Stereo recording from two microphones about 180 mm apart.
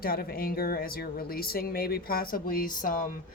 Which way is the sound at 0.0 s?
55° left (ahead or behind).